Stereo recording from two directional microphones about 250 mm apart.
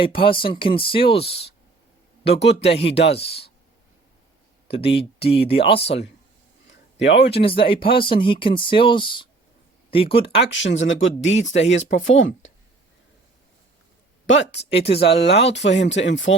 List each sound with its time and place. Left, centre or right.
0.2 s speech: left
2.2 s speech: left
3.1 s speech: left
4.7 s speech: left
6.7 s a sound: left
7.3 s speech: left
10.5 s speech: left
14.3 s speech: left
14.6 s speech: left
15.3 s speech: left